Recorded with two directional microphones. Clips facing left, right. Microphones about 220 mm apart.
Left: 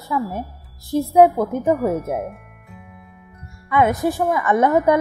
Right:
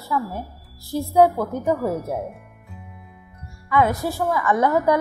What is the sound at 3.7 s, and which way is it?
A woman's voice, 20° left (ahead or behind).